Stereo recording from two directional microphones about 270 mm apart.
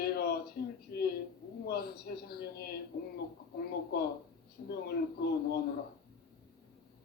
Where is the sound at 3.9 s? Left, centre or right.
Left.